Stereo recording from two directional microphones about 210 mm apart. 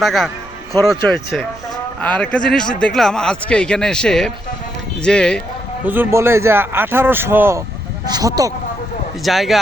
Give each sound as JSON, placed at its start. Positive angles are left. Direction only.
{"t": 0.0, "sound": "a man's voice", "side_deg": 0}
{"t": 5.8, "sound": "speech", "side_deg": -10}
{"t": 9.2, "sound": "a man's voice", "side_deg": 0}